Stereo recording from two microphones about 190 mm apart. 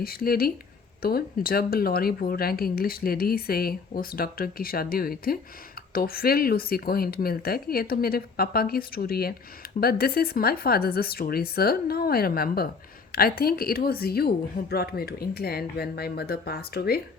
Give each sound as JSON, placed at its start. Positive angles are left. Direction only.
{"t": 0.0, "sound": "speech", "side_deg": 50}